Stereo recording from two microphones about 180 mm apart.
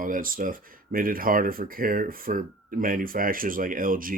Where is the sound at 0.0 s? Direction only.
50° right (ahead or behind).